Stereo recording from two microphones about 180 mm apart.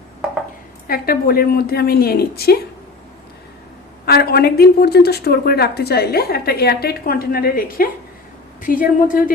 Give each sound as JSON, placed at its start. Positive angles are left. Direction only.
{"t": 0.9, "sound": "a woman's voice", "side_deg": 55}
{"t": 4.0, "sound": "a woman's voice", "side_deg": 60}